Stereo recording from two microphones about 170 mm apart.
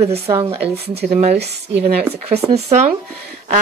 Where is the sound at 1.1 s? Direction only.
40° right (ahead or behind).